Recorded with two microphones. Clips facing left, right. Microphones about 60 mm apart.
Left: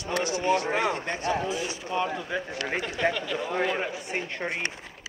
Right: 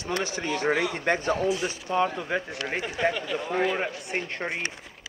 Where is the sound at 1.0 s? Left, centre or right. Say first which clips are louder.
Right 3 dB; right.